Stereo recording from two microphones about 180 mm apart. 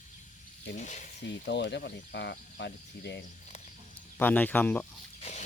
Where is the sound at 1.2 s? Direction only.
70° left (ahead or behind).